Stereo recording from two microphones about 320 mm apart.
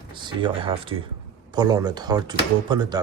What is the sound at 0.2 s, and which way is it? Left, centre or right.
Speech, centre.